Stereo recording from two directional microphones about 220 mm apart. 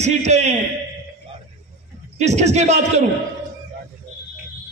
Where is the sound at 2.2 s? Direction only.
30° right (ahead or behind).